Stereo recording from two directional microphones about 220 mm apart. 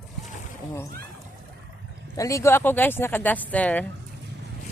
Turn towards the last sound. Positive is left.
turn(degrees=5)  # may be behind; listen again after turning